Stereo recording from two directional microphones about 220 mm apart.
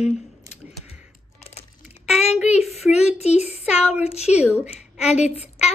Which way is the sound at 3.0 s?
30° left (ahead or behind).